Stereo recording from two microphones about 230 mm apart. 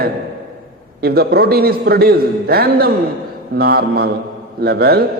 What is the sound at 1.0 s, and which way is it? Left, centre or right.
A man's voice, right.